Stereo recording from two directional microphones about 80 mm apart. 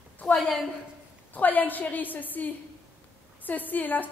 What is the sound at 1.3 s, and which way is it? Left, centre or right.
A woman's voice, left.